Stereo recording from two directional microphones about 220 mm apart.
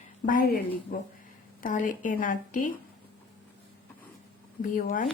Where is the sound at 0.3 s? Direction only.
40° left (ahead or behind).